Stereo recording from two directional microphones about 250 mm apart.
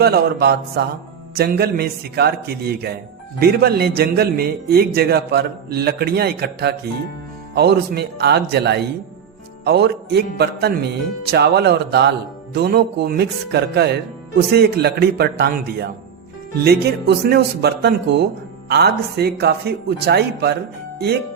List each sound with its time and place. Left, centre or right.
0.0 s speech: right